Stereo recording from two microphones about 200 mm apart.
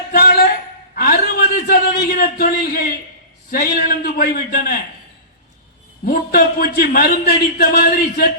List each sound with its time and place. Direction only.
0.1 s a sound: 50° left (ahead or behind)
3.5 s a man's voice: 45° left (ahead or behind)
6.1 s a man's voice: 45° left (ahead or behind)